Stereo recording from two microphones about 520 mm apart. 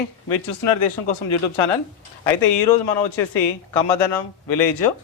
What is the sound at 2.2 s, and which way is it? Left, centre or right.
Speech, left.